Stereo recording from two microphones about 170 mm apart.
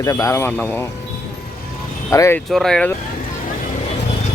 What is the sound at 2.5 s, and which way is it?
Speech, 5° left (ahead or behind).